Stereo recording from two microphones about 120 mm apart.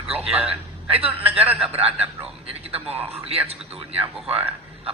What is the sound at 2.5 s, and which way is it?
A man's voice, 55° right (ahead or behind).